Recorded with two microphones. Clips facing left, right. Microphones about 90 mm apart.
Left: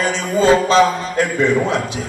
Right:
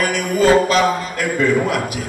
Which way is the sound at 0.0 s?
25° left (ahead or behind).